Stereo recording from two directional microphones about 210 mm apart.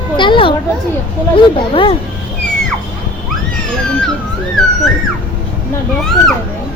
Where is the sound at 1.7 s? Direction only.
25° left (ahead or behind).